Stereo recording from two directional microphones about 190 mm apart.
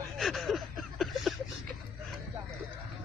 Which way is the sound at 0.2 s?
Centre (ahead or behind).